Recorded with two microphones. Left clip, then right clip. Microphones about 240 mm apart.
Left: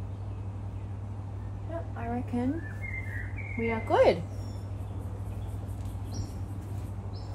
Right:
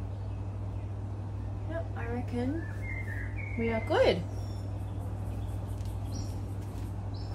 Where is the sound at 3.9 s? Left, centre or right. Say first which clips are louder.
Left 3 dB; left.